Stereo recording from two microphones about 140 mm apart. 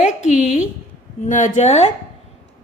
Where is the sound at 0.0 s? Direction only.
60° left (ahead or behind).